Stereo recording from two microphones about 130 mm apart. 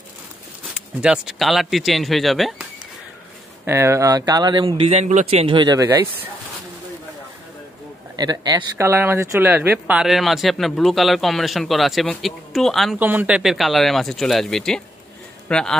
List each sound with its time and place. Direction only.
1.0 s speech: 5° right (ahead or behind)
3.6 s speech: 20° right (ahead or behind); by 4.9 s 45° right (ahead or behind)
4.9 s a man's voice: 65° right (ahead or behind)
8.2 s speech: 30° right (ahead or behind)
8.7 s speech: 20° right (ahead or behind); by 12.9 s centre (ahead or behind)
13.0 s speech: 15° right (ahead or behind); by 15.7 s 5° left (ahead or behind)